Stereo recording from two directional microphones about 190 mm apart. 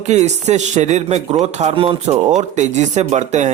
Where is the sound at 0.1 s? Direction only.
35° right (ahead or behind).